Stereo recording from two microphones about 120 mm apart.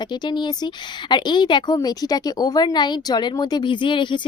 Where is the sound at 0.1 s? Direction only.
40° left (ahead or behind).